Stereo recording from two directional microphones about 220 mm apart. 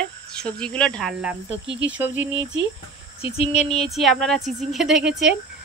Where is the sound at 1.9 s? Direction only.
5° right (ahead or behind).